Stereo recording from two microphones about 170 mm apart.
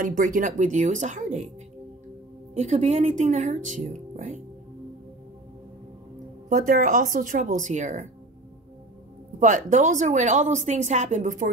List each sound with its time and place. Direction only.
0.0 s a woman's voice: 50° right (ahead or behind)
2.5 s a woman's voice: 40° right (ahead or behind)
6.5 s a woman's voice: 50° right (ahead or behind)
9.4 s a woman's voice: 50° right (ahead or behind)